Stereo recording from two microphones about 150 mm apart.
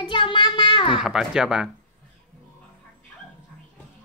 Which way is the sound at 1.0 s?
5° right (ahead or behind).